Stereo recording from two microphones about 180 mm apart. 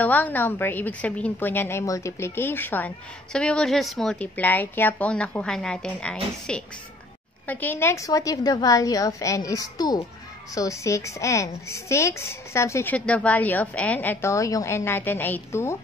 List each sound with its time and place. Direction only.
0.0 s a woman's voice: 10° left (ahead or behind)